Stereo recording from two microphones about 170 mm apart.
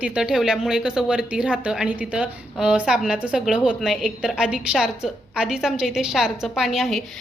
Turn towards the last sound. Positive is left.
turn(degrees=0)  # may be behind; listen again after turning